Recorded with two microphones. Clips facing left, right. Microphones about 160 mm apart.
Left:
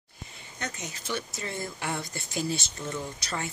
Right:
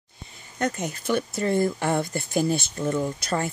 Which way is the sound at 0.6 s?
55° right (ahead or behind).